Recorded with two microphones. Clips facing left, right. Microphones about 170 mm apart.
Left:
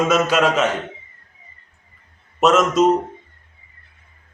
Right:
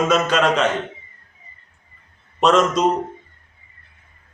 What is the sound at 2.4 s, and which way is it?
Speech, 5° left (ahead or behind).